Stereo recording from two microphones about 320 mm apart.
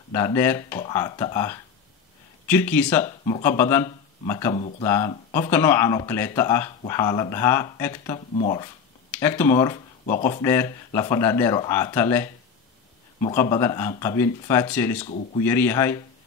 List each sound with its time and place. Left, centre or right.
0.1 s speech: centre
4.6 s speech: left
4.8 s speech: centre
9.1 s speech: centre
13.3 s speech: centre
15.0 s speech: left
15.4 s speech: centre